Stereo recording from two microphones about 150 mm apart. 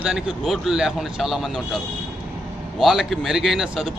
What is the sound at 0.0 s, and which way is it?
A man's voice, 5° right (ahead or behind).